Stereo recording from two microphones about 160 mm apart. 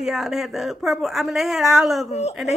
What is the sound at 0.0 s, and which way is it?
Speech, centre (ahead or behind).